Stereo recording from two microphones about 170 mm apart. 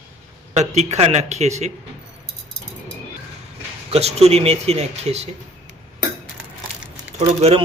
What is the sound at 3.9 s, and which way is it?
Speech, 40° right (ahead or behind).